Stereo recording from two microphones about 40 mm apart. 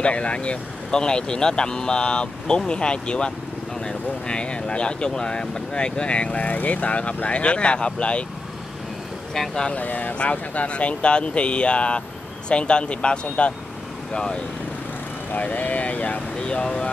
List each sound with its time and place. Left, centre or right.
0.0 s speech: left
0.9 s speech: centre
9.3 s speech: centre
9.7 s speech: left
10.1 s speech: left
15.3 s speech: left
16.4 s speech: left